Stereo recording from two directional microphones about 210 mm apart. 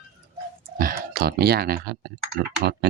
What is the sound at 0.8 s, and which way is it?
Speech, 45° right (ahead or behind).